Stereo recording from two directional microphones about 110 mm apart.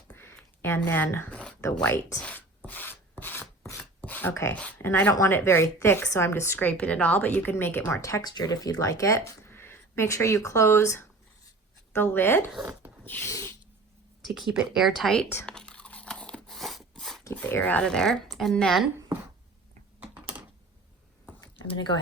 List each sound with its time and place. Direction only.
0.1 s a sound: 20° left (ahead or behind)
2.6 s rub: 15° left (ahead or behind)
5.1 s a woman's voice: 25° left (ahead or behind)
8.2 s a woman's voice: 40° left (ahead or behind); by 12.5 s 20° left (ahead or behind)
13.1 s snort: 15° left (ahead or behind)
13.3 s cat: 25° left (ahead or behind)
14.3 s speech: centre (ahead or behind)
15.4 s a sound: 10° left (ahead or behind)
17.3 s speech: 15° left (ahead or behind)
20.0 s typing: 10° right (ahead or behind)
21.8 s speech: 40° left (ahead or behind)